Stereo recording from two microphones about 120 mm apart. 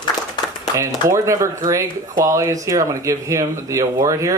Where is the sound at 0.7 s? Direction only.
25° right (ahead or behind).